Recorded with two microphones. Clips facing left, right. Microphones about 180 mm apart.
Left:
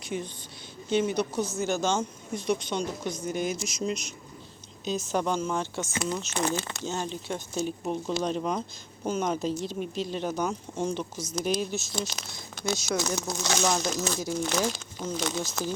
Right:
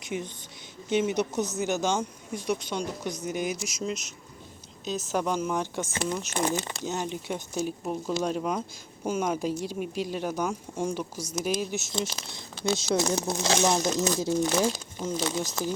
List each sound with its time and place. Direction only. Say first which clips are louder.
0.0 s a woman's voice: even; 20° right (ahead or behind)
11.7 s speech: right 1 dB; 20° right (ahead or behind)